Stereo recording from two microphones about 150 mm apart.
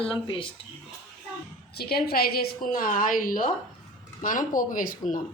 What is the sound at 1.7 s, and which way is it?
A woman's voice, 90° left.